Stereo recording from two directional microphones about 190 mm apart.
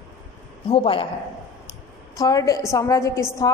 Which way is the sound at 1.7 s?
20° left (ahead or behind).